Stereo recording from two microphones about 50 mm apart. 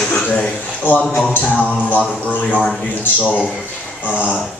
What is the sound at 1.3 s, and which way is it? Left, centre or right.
Speech, left.